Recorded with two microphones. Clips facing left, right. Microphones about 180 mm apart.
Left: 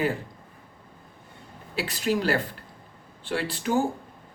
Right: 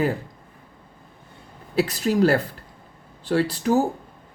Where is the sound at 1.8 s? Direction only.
40° right (ahead or behind).